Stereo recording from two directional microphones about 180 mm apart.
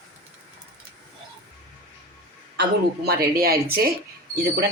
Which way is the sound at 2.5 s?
65° right (ahead or behind).